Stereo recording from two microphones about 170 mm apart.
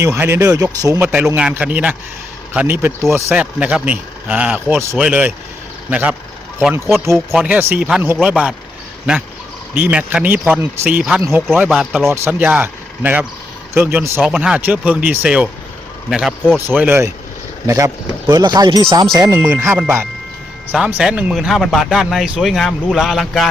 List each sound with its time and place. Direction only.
0.0 s speech: 15° right (ahead or behind)
11.7 s speech: centre (ahead or behind)
12.0 s speech: 15° right (ahead or behind); by 16.6 s centre (ahead or behind)
16.6 s speech: 10° right (ahead or behind)